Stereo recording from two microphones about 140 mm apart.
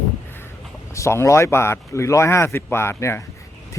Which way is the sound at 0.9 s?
20° left (ahead or behind).